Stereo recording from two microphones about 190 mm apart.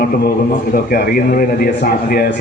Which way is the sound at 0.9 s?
50° left (ahead or behind).